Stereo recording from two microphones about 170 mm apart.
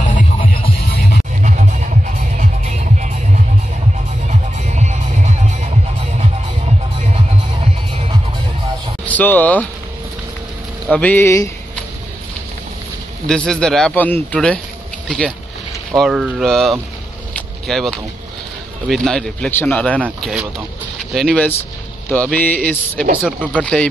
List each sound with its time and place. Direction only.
0.0 s music: 50° left (ahead or behind)
1.4 s music: 50° right (ahead or behind)
4.3 s music: 45° right (ahead or behind)
9.0 s speech: 10° left (ahead or behind)
10.9 s speech: 10° left (ahead or behind)
13.3 s a man's voice: 5° left (ahead or behind)
17.4 s vehicle: centre (ahead or behind)
18.9 s a man's voice: 5° left (ahead or behind)
20.0 s a man's voice: 5° right (ahead or behind)
23.2 s speech: 10° right (ahead or behind)
23.6 s speech: 5° left (ahead or behind)